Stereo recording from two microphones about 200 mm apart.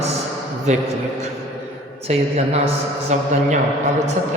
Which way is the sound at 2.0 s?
30° right (ahead or behind).